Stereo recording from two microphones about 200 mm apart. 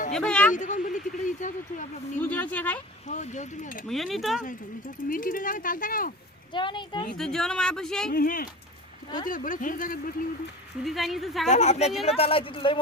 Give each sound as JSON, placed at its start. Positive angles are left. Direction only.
{"t": 0.1, "sound": "speech", "side_deg": 5}
{"t": 0.5, "sound": "speech", "side_deg": 40}
{"t": 2.2, "sound": "speech", "side_deg": 10}
{"t": 3.1, "sound": "speech", "side_deg": 35}
{"t": 3.8, "sound": "speech", "side_deg": 0}
{"t": 5.0, "sound": "speech", "side_deg": 45}
{"t": 6.5, "sound": "a man's voice", "side_deg": 25}
{"t": 7.2, "sound": "speech", "side_deg": 0}
{"t": 8.1, "sound": "speech", "side_deg": 45}
{"t": 10.8, "sound": "speech", "side_deg": 0}
{"t": 11.4, "sound": "a man's voice", "side_deg": 35}